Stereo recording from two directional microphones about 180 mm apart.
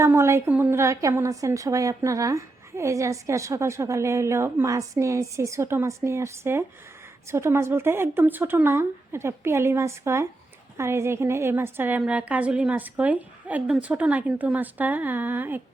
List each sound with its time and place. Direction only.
0.0 s a woman's voice: 15° right (ahead or behind)